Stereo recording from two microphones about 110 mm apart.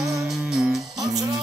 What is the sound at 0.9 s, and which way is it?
Music, 35° right (ahead or behind).